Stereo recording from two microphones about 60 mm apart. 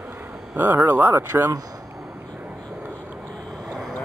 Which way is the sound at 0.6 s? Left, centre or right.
Right.